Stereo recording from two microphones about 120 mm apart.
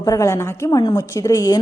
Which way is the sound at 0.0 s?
30° left (ahead or behind).